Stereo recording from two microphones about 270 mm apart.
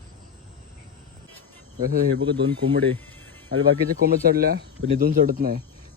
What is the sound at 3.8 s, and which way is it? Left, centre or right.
A man's voice, right.